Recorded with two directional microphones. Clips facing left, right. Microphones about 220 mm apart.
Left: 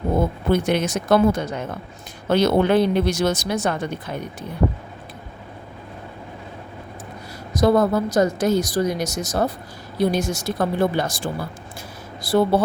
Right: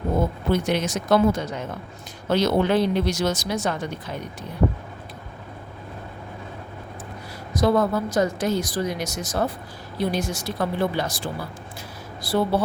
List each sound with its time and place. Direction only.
0.5 s speech: 55° left (ahead or behind)
7.6 s a woman's voice: 40° left (ahead or behind)